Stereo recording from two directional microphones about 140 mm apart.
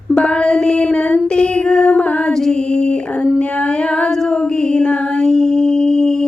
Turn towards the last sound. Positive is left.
turn(degrees=5)  # may be behind; listen again after turning